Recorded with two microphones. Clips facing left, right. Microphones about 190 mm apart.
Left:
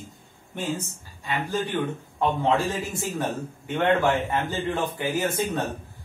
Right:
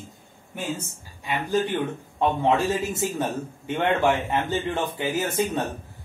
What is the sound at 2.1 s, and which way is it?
A man's voice, 20° right (ahead or behind).